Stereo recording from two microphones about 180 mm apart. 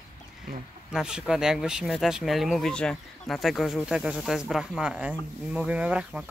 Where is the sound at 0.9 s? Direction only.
5° right (ahead or behind).